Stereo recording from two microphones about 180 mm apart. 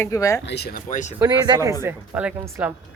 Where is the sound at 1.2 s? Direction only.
20° right (ahead or behind).